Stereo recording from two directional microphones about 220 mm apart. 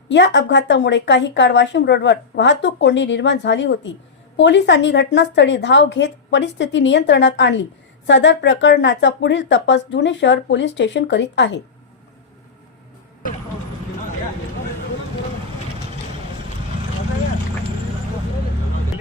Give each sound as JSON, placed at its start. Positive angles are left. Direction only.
{"t": 0.1, "sound": "a woman's voice", "side_deg": 55}